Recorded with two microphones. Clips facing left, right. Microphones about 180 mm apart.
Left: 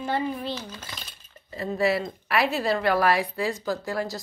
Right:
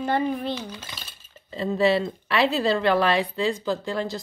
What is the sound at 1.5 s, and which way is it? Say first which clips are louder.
Speech: right 3 dB; 25° right (ahead or behind).